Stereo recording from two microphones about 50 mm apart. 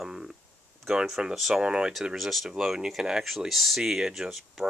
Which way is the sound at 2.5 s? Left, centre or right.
Centre.